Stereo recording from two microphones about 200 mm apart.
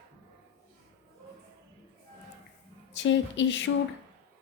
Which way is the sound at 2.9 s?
65° left (ahead or behind).